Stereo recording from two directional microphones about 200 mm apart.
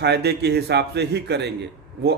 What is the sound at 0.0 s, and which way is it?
A man's voice, 55° right (ahead or behind).